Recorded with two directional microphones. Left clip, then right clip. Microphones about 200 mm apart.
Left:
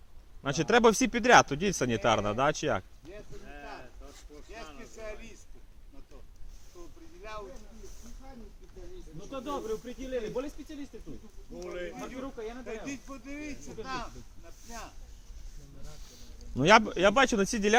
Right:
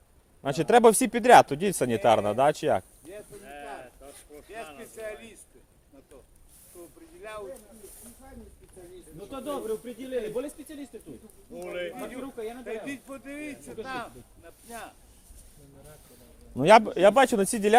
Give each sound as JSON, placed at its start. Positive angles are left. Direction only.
{"t": 0.4, "sound": "speech", "side_deg": -25}
{"t": 3.4, "sound": "a sound", "side_deg": -30}
{"t": 4.8, "sound": "speech", "side_deg": -10}
{"t": 7.2, "sound": "speech", "side_deg": -10}
{"t": 7.8, "sound": "snake", "side_deg": -45}
{"t": 9.3, "sound": "speech", "side_deg": -45}
{"t": 11.6, "sound": "speech", "side_deg": -25}
{"t": 12.8, "sound": "speech", "side_deg": -10}
{"t": 16.6, "sound": "speech", "side_deg": -20}